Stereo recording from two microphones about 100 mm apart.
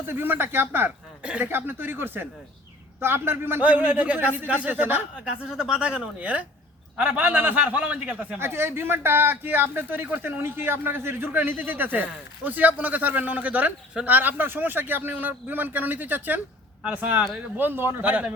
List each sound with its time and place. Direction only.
0.1 s a man's voice: 20° right (ahead or behind)